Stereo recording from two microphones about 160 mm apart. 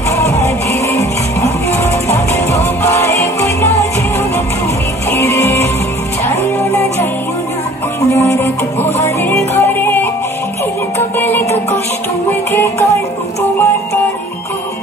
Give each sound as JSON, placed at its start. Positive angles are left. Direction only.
{"t": 0.1, "sound": "music", "side_deg": 20}
{"t": 5.1, "sound": "music", "side_deg": 15}
{"t": 8.1, "sound": "music", "side_deg": 20}
{"t": 11.1, "sound": "music", "side_deg": 15}